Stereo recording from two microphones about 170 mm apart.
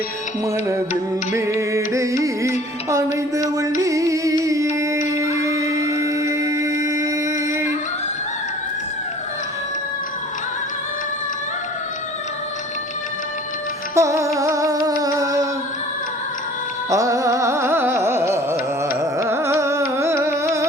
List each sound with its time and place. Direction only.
1.3 s music: 15° right (ahead or behind)
5.1 s a sound: 20° right (ahead or behind)
13.9 s music: 15° right (ahead or behind)
16.9 s carnatic music: 20° right (ahead or behind)